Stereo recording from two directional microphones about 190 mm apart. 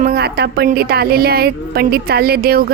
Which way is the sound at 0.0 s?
55° right (ahead or behind).